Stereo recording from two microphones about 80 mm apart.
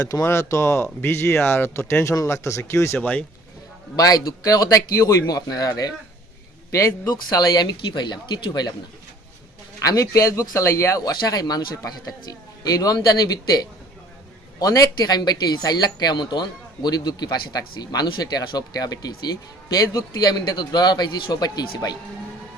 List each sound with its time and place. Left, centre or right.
0.0 s speech: left
3.0 s speech: centre
3.9 s a man's voice: left
6.7 s speech: left
7.1 s speech: left
9.8 s a man's voice: left
10.1 s a man's voice: left